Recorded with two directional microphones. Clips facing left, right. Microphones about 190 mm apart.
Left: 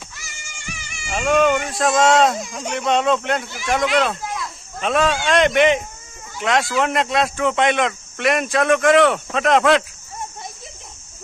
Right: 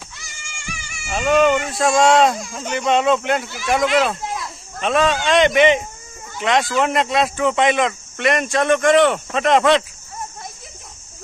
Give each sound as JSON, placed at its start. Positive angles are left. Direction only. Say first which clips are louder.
{"t": 1.0, "sound": "speech", "louder": "right 1 dB", "side_deg": 0}
{"t": 4.2, "sound": "snake", "louder": "right 1 dB", "side_deg": -25}
{"t": 4.8, "sound": "speech", "louder": "right 1 dB", "side_deg": 0}